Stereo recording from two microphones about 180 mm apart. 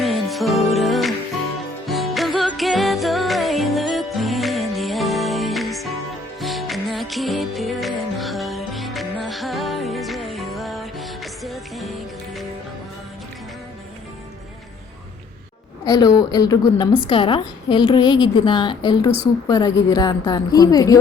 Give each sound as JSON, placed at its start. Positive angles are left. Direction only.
{"t": 0.0, "sound": "music", "side_deg": 0}
{"t": 15.9, "sound": "a woman's voice", "side_deg": 20}